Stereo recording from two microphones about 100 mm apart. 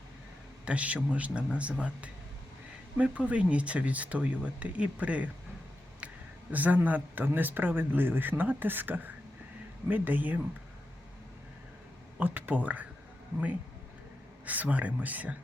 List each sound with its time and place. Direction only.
0.6 s speech: 10° right (ahead or behind)
6.5 s speech: 15° right (ahead or behind)
12.2 s speech: 20° right (ahead or behind)
14.4 s speech: 15° right (ahead or behind)